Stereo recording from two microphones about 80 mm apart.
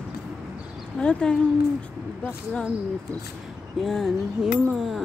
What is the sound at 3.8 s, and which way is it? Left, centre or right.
Speech, centre.